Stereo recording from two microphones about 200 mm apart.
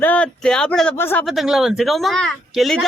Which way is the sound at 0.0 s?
5° left (ahead or behind).